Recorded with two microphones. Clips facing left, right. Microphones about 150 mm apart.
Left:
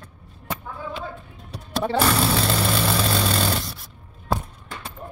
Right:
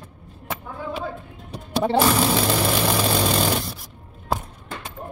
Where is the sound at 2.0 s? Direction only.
5° right (ahead or behind).